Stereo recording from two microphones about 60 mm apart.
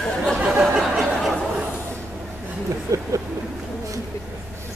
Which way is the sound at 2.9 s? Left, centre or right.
Right.